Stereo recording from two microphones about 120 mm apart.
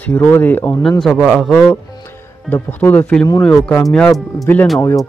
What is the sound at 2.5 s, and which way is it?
A man's voice, 15° left (ahead or behind).